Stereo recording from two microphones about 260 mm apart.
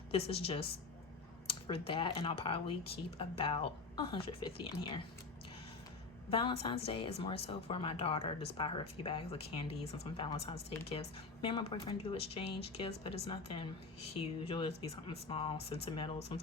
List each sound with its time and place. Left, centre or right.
0.1 s speech: left
6.3 s speech: centre